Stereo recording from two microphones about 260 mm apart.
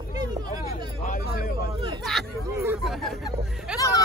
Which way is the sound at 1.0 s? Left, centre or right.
Left.